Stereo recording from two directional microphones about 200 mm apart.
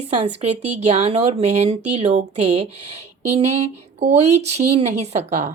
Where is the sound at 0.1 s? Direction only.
35° right (ahead or behind).